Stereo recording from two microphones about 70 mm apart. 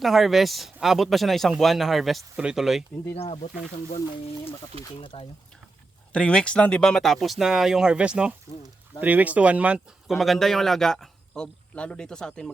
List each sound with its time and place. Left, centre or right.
0.0 s speech: centre
6.1 s speech: centre
10.1 s a man's voice: centre
11.7 s speech: centre